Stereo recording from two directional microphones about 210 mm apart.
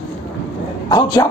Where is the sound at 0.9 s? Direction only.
20° left (ahead or behind).